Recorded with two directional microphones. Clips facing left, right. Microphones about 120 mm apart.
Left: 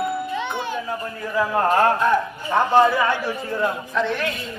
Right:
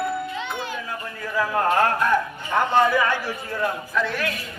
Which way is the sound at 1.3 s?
15° left (ahead or behind).